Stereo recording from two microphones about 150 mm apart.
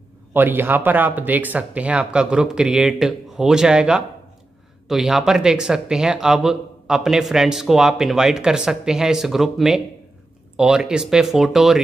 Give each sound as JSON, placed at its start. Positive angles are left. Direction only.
{"t": 0.3, "sound": "speech", "side_deg": -15}